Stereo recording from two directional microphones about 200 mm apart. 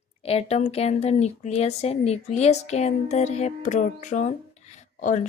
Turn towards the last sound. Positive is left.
turn(degrees=40)  # may be behind; listen again after turning